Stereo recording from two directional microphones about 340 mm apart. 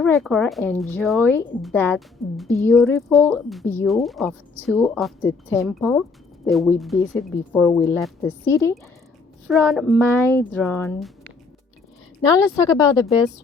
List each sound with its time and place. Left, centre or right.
0.0 s speech: centre
12.6 s speech: centre